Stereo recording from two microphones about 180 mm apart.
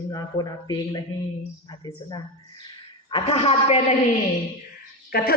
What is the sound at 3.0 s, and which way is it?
Speech, 30° left (ahead or behind).